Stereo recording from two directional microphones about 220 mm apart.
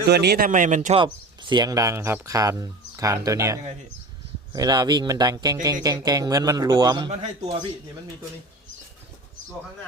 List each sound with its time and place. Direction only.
0.1 s speech: 50° right (ahead or behind)
0.9 s a man's voice: 20° right (ahead or behind)